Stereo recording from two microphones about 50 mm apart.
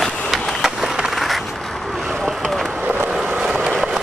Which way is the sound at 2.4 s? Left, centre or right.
Centre.